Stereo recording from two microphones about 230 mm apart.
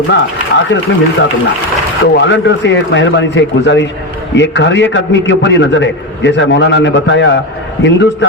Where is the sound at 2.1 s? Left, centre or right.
Left.